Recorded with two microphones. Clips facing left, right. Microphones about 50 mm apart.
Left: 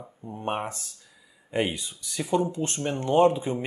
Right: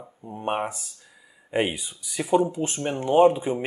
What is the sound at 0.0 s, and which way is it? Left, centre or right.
Speech, centre.